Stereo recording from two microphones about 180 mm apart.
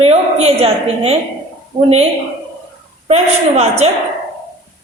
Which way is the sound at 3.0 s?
35° right (ahead or behind).